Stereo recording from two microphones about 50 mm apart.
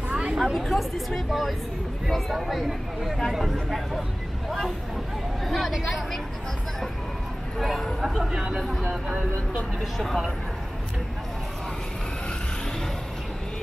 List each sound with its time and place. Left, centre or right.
0.1 s chatter: centre
0.6 s speech: centre
5.7 s speech: centre
7.5 s speech: centre
8.2 s speech: centre
8.5 s speech: centre